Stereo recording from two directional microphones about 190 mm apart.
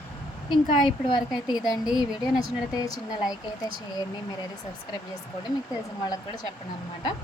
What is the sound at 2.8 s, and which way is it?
Speech, 20° left (ahead or behind).